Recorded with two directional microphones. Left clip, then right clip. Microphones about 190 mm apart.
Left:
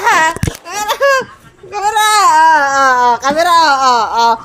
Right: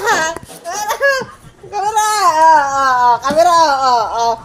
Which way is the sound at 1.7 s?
60° left (ahead or behind).